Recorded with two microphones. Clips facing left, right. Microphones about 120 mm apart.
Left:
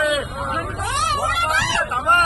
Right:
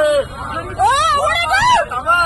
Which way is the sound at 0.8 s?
90° right.